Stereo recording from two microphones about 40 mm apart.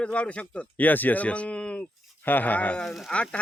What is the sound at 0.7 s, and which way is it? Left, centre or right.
Speech, left.